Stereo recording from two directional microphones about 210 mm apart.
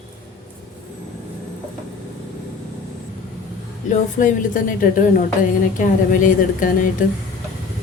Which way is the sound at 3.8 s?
40° left (ahead or behind).